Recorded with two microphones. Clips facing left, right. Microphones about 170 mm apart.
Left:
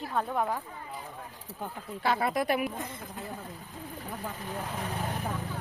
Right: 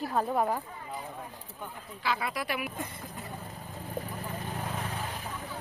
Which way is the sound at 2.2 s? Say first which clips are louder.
Left 6 dB; 45° left (ahead or behind).